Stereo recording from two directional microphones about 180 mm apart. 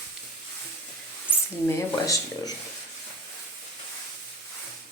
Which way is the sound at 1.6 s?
15° left (ahead or behind).